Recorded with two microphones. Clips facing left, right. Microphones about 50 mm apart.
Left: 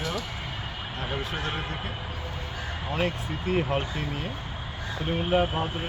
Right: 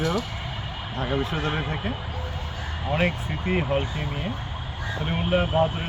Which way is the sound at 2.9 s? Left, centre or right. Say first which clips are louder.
Right 4 dB; right.